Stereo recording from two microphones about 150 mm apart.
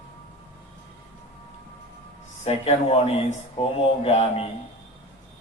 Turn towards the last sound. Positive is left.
turn(degrees=40)  # may be behind; listen again after turning